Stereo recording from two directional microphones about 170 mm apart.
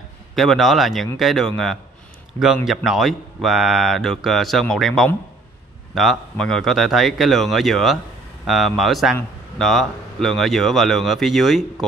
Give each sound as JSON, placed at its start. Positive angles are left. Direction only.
{"t": 0.4, "sound": "speech", "side_deg": 0}